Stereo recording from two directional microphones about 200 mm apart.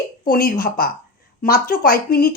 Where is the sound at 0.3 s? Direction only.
50° left (ahead or behind).